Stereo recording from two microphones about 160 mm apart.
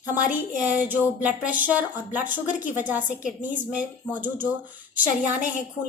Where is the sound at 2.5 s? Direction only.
55° left (ahead or behind).